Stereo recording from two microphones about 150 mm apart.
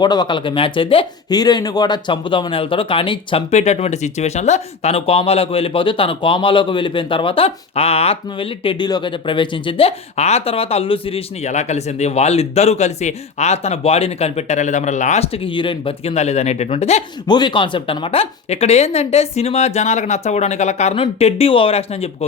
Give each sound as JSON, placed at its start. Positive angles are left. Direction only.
{"t": 0.0, "sound": "speech", "side_deg": 30}
{"t": 17.2, "sound": "speech", "side_deg": 30}